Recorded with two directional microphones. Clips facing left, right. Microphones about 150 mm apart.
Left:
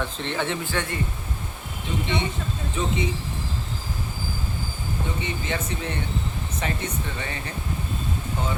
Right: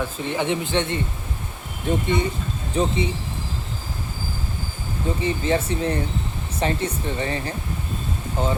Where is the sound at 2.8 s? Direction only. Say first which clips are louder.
Right 6 dB; 35° right (ahead or behind).